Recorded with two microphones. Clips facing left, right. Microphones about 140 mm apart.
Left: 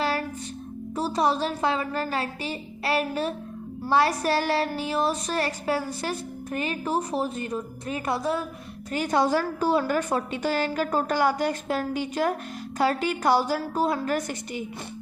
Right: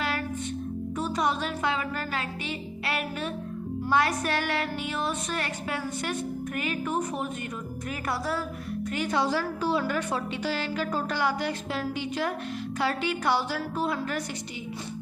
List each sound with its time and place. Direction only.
0.9 s music: 35° left (ahead or behind)
8.0 s a woman's voice: 20° left (ahead or behind)
9.0 s a woman's voice: 45° left (ahead or behind)
12.8 s music: 40° left (ahead or behind)